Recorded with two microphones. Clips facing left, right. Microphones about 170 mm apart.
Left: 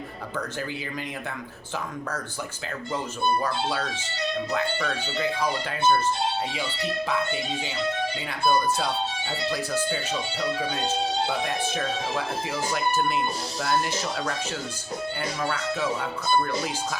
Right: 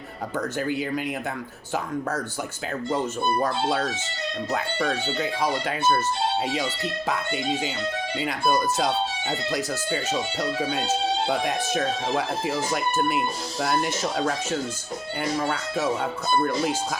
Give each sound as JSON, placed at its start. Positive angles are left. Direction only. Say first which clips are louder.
{"t": 0.3, "sound": "speech", "louder": "right 6 dB", "side_deg": -50}
{"t": 3.4, "sound": "speech", "louder": "right 3 dB", "side_deg": -50}
{"t": 8.3, "sound": "speech", "louder": "even", "side_deg": -40}
{"t": 10.1, "sound": "speech", "louder": "right 2 dB", "side_deg": -40}
{"t": 12.1, "sound": "speech", "louder": "right 4 dB", "side_deg": -50}